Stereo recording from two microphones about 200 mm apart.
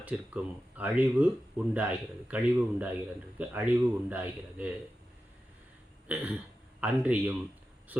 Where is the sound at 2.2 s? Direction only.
5° right (ahead or behind).